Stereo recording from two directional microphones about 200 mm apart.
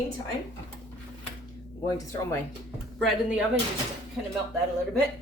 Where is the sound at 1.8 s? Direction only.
15° left (ahead or behind).